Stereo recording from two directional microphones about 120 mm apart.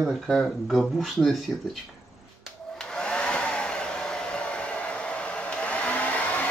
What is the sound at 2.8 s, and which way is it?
Hair dryer, 5° left (ahead or behind).